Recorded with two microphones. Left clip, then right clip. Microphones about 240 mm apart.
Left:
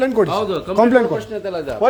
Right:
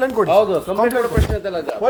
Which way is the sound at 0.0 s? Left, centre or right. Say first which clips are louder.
Right 3 dB; left.